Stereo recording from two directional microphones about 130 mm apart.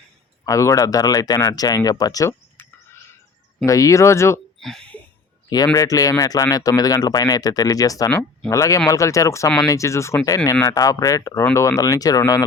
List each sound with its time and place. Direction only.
0.4 s speech: 25° left (ahead or behind)
3.7 s speech: 25° left (ahead or behind)
4.6 s speech: 5° left (ahead or behind)
5.7 s speech: 25° left (ahead or behind)